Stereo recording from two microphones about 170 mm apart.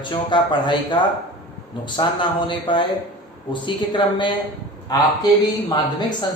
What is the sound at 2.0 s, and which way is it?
Speech, 25° left (ahead or behind).